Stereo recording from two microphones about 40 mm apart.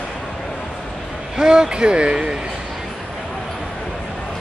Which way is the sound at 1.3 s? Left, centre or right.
Centre.